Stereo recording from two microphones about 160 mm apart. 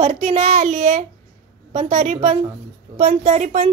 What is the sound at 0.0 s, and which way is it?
A woman's voice, 45° right (ahead or behind).